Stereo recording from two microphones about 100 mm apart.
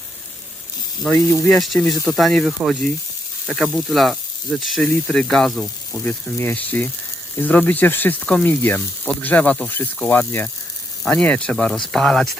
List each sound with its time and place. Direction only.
1.1 s speech: 30° left (ahead or behind)
1.5 s speech: 5° left (ahead or behind)
4.8 s speech: 10° left (ahead or behind)
6.0 s speech: 15° left (ahead or behind)